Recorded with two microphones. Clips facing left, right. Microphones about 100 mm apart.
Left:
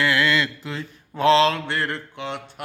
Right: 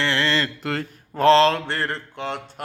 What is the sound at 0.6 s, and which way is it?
Speech, 60° right (ahead or behind).